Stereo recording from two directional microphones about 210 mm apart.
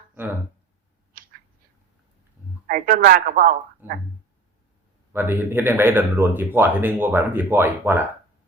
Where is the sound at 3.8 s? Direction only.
10° right (ahead or behind).